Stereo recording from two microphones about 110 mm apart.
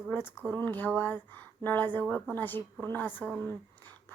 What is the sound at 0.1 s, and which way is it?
A woman's voice, 20° left (ahead or behind).